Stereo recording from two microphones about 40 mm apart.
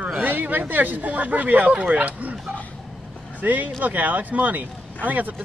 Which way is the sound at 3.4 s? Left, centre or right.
Right.